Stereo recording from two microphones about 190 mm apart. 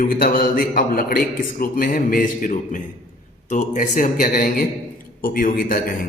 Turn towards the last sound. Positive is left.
turn(degrees=45)  # may be behind; listen again after turning